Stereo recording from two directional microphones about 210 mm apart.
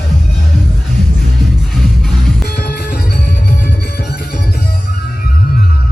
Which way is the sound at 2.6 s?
45° left (ahead or behind).